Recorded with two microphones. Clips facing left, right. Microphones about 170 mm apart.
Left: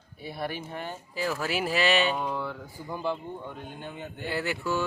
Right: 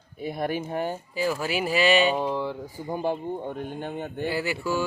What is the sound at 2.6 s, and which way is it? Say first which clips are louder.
Speech: right 4 dB; 40° right (ahead or behind).